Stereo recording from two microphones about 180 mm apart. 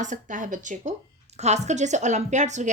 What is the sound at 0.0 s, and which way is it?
A woman's voice, 45° right (ahead or behind).